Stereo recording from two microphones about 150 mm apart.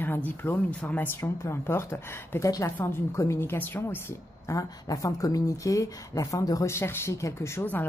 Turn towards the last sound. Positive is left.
turn(degrees=15)  # may be behind; listen again after turning